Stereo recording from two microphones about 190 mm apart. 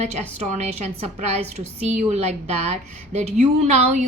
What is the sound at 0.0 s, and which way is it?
A woman's voice, 35° right (ahead or behind).